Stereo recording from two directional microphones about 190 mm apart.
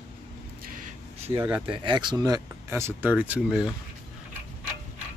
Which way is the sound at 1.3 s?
10° right (ahead or behind).